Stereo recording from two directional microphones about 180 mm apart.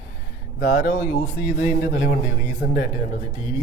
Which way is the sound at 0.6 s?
55° left (ahead or behind).